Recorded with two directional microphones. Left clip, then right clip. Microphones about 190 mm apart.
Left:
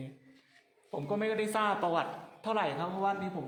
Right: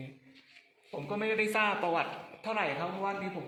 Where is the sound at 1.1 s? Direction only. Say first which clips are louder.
Right 1 dB; 50° left (ahead or behind).